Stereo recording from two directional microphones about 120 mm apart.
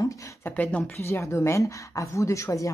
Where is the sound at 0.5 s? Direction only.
15° left (ahead or behind).